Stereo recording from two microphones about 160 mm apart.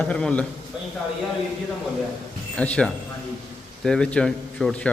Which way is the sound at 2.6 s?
5° left (ahead or behind).